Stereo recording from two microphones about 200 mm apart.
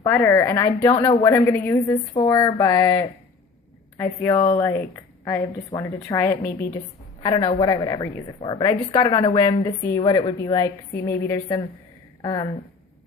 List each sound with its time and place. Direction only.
0.0 s a woman's voice: 10° left (ahead or behind)